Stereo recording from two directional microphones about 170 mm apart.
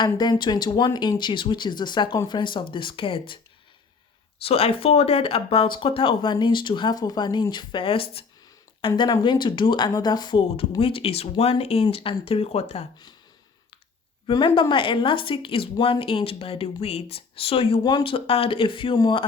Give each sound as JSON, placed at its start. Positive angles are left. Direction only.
{"t": 0.0, "sound": "speech", "side_deg": 25}
{"t": 4.4, "sound": "speech", "side_deg": 35}
{"t": 14.3, "sound": "speech", "side_deg": 30}